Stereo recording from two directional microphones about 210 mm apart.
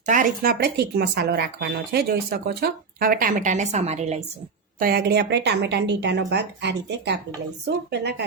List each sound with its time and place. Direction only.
0.0 s speech: 40° right (ahead or behind)
4.8 s speech: 45° right (ahead or behind)